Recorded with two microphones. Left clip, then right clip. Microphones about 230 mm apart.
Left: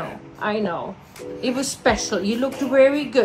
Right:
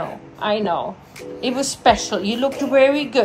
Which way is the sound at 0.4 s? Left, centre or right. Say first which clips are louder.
Right 4 dB; left.